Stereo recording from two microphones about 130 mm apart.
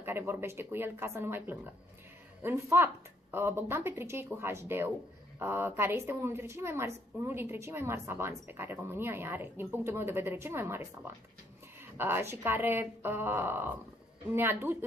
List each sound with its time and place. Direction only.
0.0 s a woman's voice: 20° right (ahead or behind)